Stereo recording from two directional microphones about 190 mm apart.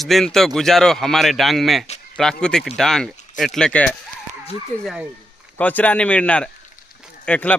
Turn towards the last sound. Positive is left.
turn(degrees=10)  # may be behind; listen again after turning